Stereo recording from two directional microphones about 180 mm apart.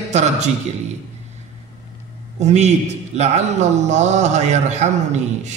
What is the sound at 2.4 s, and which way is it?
A man's voice, 40° right (ahead or behind).